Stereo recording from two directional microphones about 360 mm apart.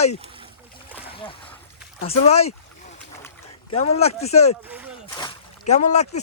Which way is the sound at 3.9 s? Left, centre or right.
Centre.